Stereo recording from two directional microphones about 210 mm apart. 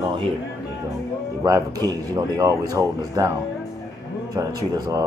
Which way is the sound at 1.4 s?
15° right (ahead or behind).